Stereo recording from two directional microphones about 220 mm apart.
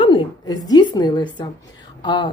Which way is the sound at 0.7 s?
20° left (ahead or behind).